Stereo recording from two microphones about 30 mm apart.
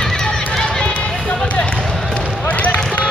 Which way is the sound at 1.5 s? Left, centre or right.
Left.